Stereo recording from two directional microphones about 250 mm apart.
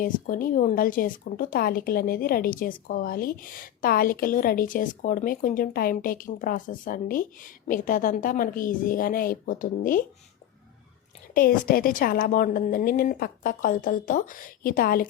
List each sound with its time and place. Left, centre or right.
0.0 s speech: left
11.7 s speech: left